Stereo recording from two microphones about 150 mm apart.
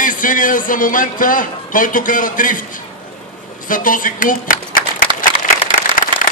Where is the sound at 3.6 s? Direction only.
65° left (ahead or behind).